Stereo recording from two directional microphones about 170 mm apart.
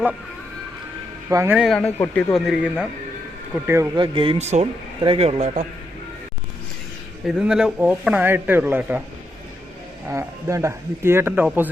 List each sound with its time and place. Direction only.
1.3 s speech: 20° right (ahead or behind)
1.5 s speech: centre (ahead or behind)
3.9 s speech: 30° right (ahead or behind)
7.3 s speech: 5° right (ahead or behind)
10.1 s speech: 15° right (ahead or behind)